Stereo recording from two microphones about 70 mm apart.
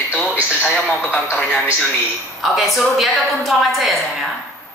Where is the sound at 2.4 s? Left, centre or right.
Centre.